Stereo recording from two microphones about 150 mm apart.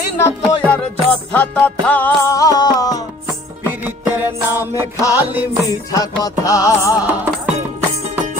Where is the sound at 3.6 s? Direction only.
15° right (ahead or behind).